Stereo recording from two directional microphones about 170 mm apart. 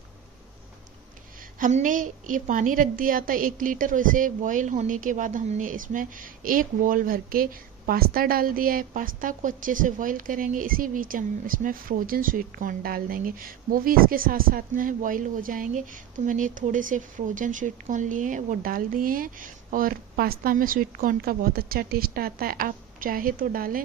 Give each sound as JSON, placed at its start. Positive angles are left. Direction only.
{"t": 1.6, "sound": "a woman's voice", "side_deg": -50}